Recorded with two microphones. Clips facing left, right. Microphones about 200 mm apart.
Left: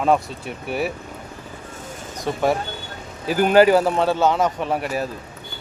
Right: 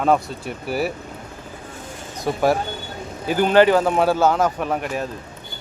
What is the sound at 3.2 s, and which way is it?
Speech, 5° left (ahead or behind).